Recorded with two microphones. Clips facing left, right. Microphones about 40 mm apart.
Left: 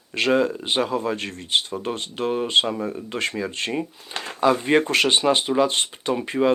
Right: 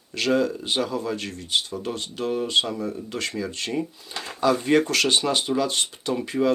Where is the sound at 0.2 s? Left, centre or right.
Left.